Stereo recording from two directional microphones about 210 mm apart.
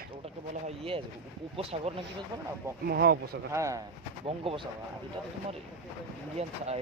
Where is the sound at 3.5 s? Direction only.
15° right (ahead or behind).